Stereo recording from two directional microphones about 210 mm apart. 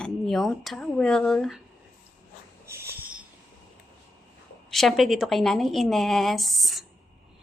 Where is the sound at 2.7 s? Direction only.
10° right (ahead or behind).